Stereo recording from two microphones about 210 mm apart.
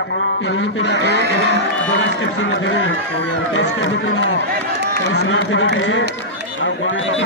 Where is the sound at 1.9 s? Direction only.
60° left (ahead or behind).